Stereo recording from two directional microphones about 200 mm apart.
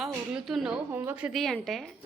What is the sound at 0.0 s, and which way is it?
A woman's voice, centre (ahead or behind).